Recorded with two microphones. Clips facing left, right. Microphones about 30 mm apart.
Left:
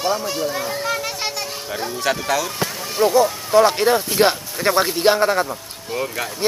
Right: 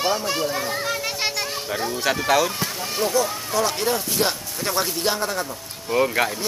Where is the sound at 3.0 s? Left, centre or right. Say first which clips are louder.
Left 7 dB; left.